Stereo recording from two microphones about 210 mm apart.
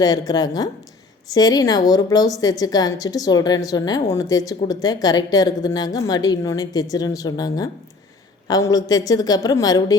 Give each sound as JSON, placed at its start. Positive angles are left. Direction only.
{"t": 0.0, "sound": "a woman's voice", "side_deg": 15}